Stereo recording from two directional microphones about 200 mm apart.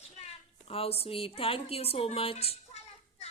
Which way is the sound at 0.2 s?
30° left (ahead or behind).